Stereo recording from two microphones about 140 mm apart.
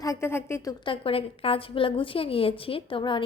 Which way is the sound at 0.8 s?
40° left (ahead or behind).